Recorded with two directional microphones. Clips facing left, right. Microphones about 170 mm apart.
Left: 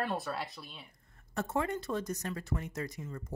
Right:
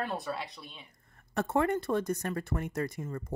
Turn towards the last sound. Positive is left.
turn(degrees=-55)  # may be behind; listen again after turning